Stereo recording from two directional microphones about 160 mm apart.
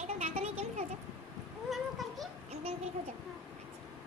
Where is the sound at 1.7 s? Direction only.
Centre (ahead or behind).